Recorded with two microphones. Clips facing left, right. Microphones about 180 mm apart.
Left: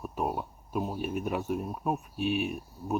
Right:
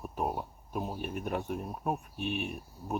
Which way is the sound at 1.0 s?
5° left (ahead or behind).